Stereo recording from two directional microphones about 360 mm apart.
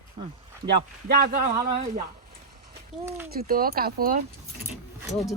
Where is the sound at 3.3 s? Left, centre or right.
Right.